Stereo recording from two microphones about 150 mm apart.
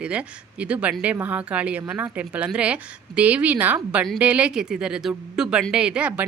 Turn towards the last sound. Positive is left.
turn(degrees=-10)  # may be behind; listen again after turning